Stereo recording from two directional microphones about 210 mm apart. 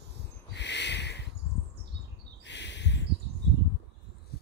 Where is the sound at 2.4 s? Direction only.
55° left (ahead or behind).